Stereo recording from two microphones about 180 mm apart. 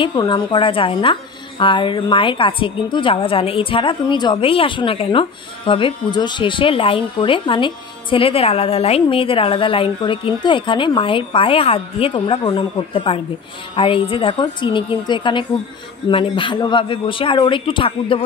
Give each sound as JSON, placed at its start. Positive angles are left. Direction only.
{"t": 0.0, "sound": "speech", "side_deg": 25}